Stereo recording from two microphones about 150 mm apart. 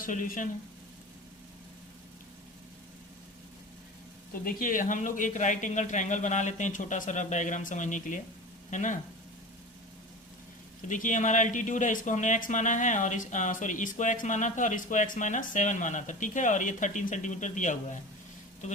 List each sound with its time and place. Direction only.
0.0 s speech: 65° left (ahead or behind)
4.4 s speech: 65° left (ahead or behind)
10.8 s speech: 60° left (ahead or behind)